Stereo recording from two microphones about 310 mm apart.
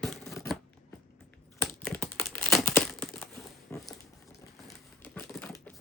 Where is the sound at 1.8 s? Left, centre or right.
Centre.